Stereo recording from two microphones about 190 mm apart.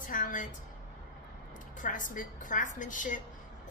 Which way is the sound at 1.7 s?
45° left (ahead or behind).